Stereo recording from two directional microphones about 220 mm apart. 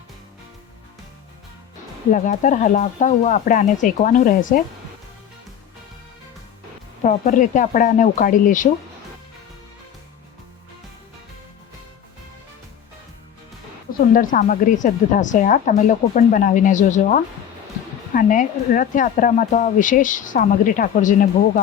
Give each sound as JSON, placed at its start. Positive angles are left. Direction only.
{"t": 2.1, "sound": "speech", "side_deg": 35}
{"t": 7.0, "sound": "speech", "side_deg": 35}
{"t": 14.1, "sound": "speech", "side_deg": 40}